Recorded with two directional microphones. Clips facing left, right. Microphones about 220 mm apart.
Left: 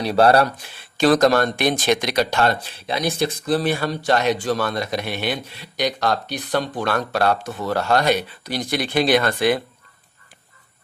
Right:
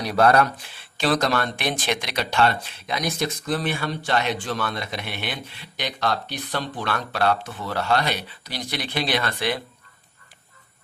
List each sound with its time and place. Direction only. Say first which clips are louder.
0.0 s speech: left 3 dB; 30° left (ahead or behind)
0.9 s speech: left 7 dB; 45° left (ahead or behind)